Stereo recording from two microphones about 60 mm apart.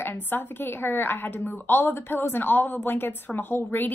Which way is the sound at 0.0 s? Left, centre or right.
Left.